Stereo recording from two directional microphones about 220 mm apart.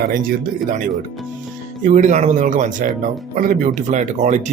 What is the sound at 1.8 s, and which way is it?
Speech, 35° right (ahead or behind).